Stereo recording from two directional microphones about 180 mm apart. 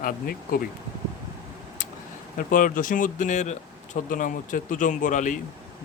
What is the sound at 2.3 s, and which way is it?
Speech, 50° left (ahead or behind).